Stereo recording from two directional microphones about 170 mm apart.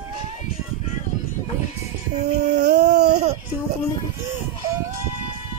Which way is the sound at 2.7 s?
45° right (ahead or behind).